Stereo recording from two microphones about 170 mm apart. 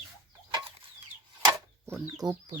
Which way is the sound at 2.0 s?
20° right (ahead or behind).